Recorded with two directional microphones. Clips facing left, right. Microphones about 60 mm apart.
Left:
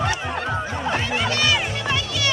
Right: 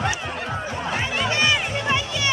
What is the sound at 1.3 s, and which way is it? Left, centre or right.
Music, right.